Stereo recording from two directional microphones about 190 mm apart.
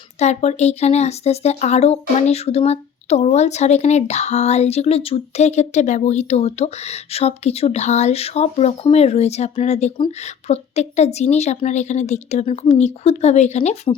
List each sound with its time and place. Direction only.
0.2 s speech: 35° left (ahead or behind)